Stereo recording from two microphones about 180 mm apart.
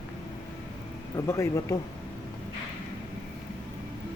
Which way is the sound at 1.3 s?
15° left (ahead or behind).